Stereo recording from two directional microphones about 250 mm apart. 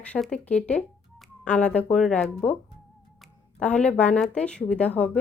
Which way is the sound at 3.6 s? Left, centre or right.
Centre.